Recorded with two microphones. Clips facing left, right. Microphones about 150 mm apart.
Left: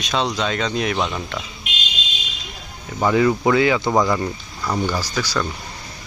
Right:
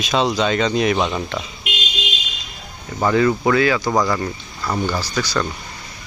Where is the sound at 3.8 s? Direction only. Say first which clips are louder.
Left 1 dB; centre (ahead or behind).